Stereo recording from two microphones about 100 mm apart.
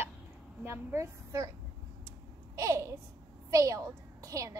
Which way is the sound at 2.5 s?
30° right (ahead or behind).